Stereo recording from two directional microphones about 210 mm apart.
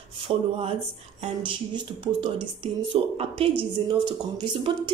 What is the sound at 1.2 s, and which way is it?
Speech, 25° right (ahead or behind).